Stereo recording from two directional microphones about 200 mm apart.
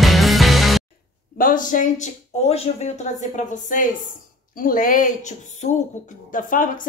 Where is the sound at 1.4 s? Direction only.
40° left (ahead or behind).